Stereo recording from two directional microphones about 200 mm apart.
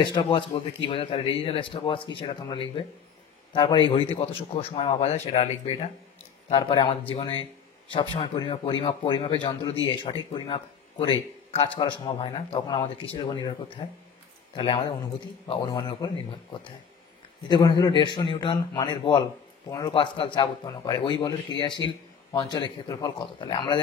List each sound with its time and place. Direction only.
0.0 s speech: 25° left (ahead or behind)